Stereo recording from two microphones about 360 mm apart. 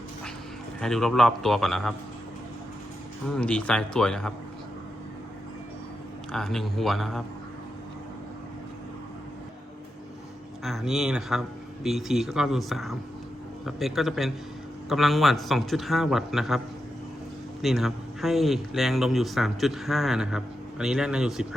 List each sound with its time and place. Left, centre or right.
0.8 s speech: centre
3.3 s speech: centre
6.3 s speech: centre
10.6 s speech: centre
17.6 s speech: centre